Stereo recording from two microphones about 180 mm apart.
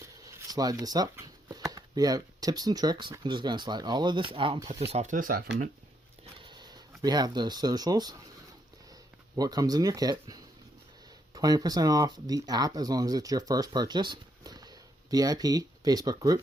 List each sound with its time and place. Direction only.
0.3 s speech: 20° right (ahead or behind)
4.9 s speech: 40° right (ahead or behind)
6.4 s a sound: 25° right (ahead or behind)
7.0 s speech: 20° right (ahead or behind)
9.3 s speech: 20° right (ahead or behind)